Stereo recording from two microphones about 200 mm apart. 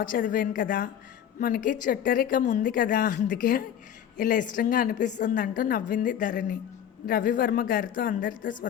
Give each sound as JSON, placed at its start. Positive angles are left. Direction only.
{"t": 0.0, "sound": "a woman's voice", "side_deg": 45}